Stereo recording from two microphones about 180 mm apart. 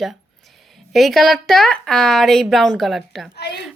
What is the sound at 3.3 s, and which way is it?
Speech, 65° left (ahead or behind).